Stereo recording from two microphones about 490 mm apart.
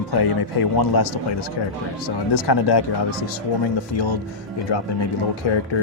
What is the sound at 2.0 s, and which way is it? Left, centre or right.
Speech, left.